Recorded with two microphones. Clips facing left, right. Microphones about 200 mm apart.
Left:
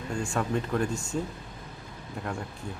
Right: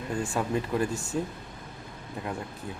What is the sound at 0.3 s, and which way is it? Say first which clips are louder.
Speech: even; 5° right (ahead or behind).